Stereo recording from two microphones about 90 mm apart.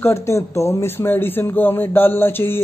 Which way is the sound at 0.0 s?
30° left (ahead or behind).